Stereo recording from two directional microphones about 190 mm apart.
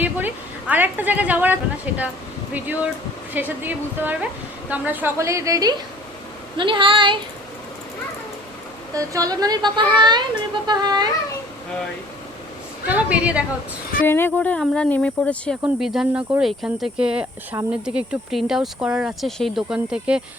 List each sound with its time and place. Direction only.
0.0 s a woman's voice: 10° right (ahead or behind); by 7.2 s 25° right (ahead or behind)
9.0 s speech: 20° right (ahead or behind)
12.9 s a woman's voice: 5° right (ahead or behind)
14.0 s speech: 10° left (ahead or behind); by 20.2 s 5° right (ahead or behind)